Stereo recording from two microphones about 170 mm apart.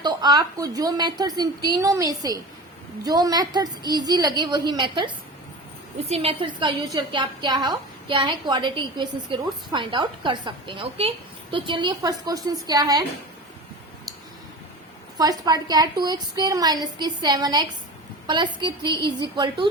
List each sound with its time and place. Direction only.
0.0 s a woman's voice: 25° right (ahead or behind)
15.2 s a woman's voice: 20° right (ahead or behind)